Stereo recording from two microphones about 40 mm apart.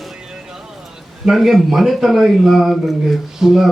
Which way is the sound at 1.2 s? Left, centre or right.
Centre.